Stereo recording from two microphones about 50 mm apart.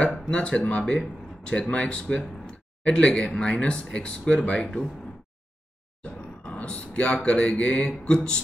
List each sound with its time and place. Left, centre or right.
0.3 s speech: left
6.5 s speech: left